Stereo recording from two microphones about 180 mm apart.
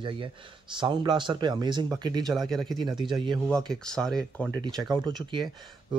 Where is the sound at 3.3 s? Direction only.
5° left (ahead or behind).